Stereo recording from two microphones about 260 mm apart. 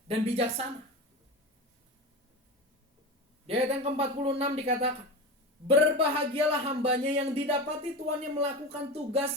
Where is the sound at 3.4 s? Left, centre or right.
Right.